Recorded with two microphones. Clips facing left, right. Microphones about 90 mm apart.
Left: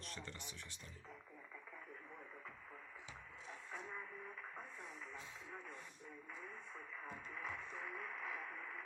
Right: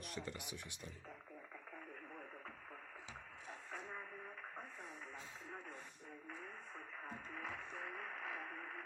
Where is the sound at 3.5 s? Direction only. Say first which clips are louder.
Right 1 dB; 35° right (ahead or behind).